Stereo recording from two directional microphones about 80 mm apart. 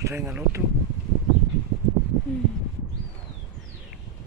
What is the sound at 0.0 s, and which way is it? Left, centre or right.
Speech, right.